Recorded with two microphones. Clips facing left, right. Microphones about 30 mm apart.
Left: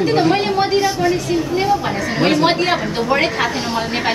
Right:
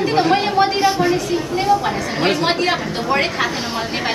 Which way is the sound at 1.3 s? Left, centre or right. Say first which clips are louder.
Even; centre.